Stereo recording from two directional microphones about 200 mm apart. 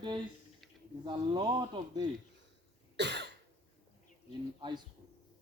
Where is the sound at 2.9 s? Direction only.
60° right (ahead or behind).